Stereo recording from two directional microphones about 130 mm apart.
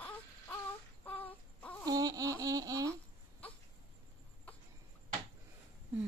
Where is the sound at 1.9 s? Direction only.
30° right (ahead or behind).